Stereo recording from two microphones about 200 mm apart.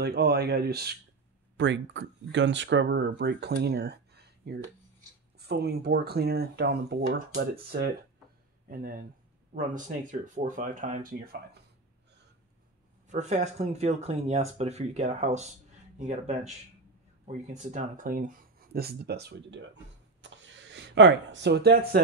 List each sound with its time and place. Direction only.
0.0 s speech: 55° right (ahead or behind)
1.6 s speech: 65° right (ahead or behind); by 11.3 s 45° right (ahead or behind)
13.1 s speech: 35° right (ahead or behind)
17.5 s speech: 35° right (ahead or behind); by 22.0 s 55° right (ahead or behind)